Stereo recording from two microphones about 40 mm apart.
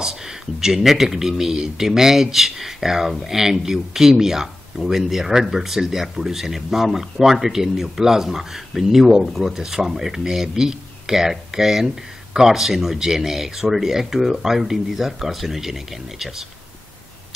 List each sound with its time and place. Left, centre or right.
0.0 s speech: centre